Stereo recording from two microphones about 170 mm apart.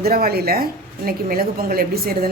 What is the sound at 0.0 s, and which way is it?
A woman's voice, 60° right (ahead or behind).